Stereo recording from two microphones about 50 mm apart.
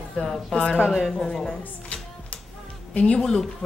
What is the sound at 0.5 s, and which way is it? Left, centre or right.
Speech, centre.